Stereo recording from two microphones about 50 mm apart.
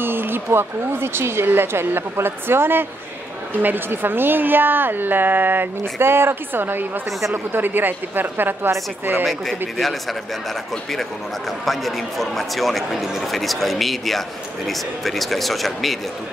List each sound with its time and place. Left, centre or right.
0.0 s speech: right
9.2 s a man's voice: centre